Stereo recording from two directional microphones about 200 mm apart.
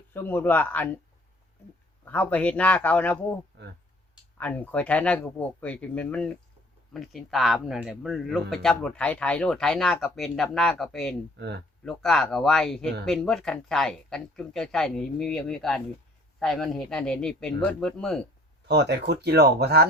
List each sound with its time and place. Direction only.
0.1 s speech: 10° left (ahead or behind)
2.0 s speech: 10° left (ahead or behind)
3.5 s speech: 60° right (ahead or behind)
4.4 s a man's voice: 10° left (ahead or behind)
11.3 s speech: 55° right (ahead or behind)
11.9 s a man's voice: 5° left (ahead or behind)
18.7 s speech: 55° right (ahead or behind)